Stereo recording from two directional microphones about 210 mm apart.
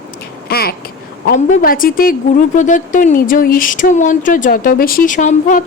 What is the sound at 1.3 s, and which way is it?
A woman's voice, 40° left (ahead or behind).